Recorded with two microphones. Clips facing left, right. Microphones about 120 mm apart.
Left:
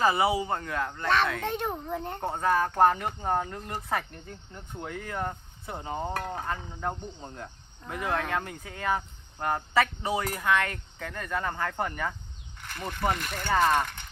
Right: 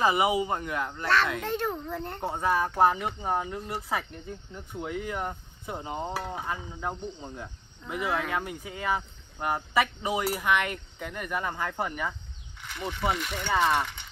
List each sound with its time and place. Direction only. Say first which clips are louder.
0.0 s cricket: even; 15° right (ahead or behind)
1.5 s a child's voice: right 1 dB; centre (ahead or behind)
2.2 s cricket: left 1 dB; 10° right (ahead or behind)